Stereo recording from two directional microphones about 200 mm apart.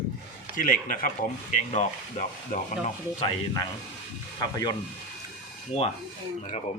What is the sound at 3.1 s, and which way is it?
Speech, 25° left (ahead or behind).